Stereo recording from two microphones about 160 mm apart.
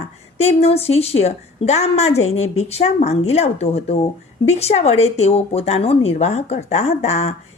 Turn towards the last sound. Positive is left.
turn(degrees=45)  # may be behind; listen again after turning